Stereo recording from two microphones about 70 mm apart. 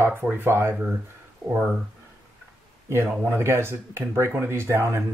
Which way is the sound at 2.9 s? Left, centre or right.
Right.